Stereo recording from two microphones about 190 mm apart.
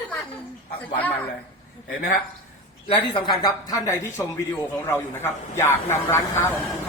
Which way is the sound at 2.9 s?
25° left (ahead or behind).